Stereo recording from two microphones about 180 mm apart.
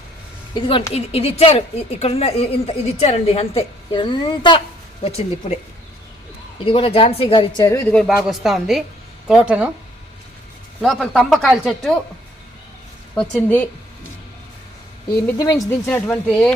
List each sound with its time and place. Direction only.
0.5 s a woman's voice: 25° left (ahead or behind)
5.0 s a woman's voice: 35° left (ahead or behind)
6.7 s speech: 30° left (ahead or behind)
7.9 s speech: centre (ahead or behind)
10.8 s speech: 5° left (ahead or behind)
13.1 s speech: 5° left (ahead or behind)
15.4 s speech: 20° left (ahead or behind)
15.9 s speech: 10° left (ahead or behind)